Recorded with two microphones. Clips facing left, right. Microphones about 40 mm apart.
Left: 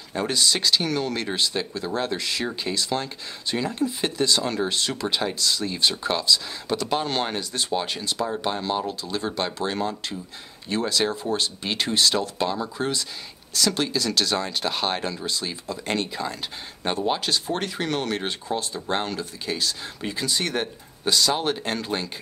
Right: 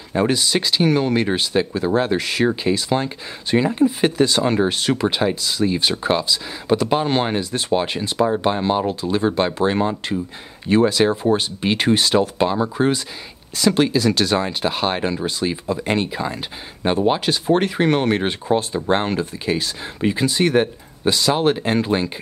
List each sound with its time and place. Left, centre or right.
0.1 s speech: right